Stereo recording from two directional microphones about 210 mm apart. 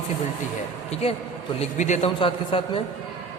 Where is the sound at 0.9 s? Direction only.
30° left (ahead or behind).